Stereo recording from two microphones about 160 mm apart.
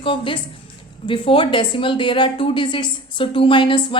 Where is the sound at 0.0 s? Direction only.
35° left (ahead or behind).